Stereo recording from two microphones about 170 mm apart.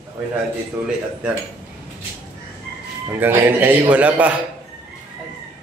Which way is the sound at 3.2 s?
10° right (ahead or behind).